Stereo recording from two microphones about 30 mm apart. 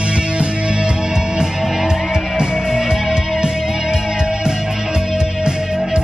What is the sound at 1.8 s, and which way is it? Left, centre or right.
Music, centre.